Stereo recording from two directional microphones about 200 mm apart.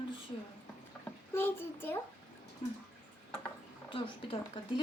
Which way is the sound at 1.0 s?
10° left (ahead or behind).